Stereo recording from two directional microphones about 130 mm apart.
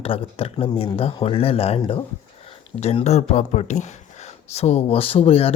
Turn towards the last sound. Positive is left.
turn(degrees=50)  # may be behind; listen again after turning